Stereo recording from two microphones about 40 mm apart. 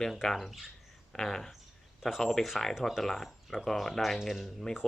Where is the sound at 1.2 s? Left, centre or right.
Centre.